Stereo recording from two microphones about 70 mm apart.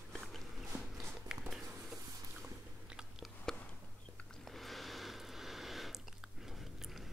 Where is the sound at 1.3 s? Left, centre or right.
Centre.